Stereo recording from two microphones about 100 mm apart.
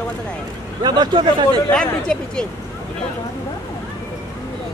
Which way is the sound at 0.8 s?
45° right (ahead or behind).